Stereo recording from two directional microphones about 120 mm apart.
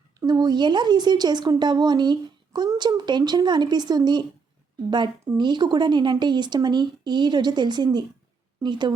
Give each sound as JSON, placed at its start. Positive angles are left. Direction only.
{"t": 0.2, "sound": "speech", "side_deg": -35}
{"t": 5.4, "sound": "speech", "side_deg": -40}